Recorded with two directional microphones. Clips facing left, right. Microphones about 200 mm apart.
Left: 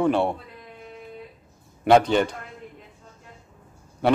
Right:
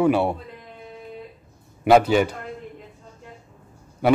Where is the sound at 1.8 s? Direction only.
5° right (ahead or behind).